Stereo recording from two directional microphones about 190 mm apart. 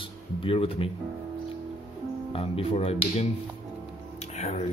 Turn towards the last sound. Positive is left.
turn(degrees=35)  # may be behind; listen again after turning